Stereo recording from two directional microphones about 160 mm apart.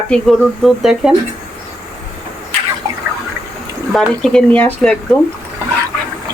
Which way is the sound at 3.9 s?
Centre (ahead or behind).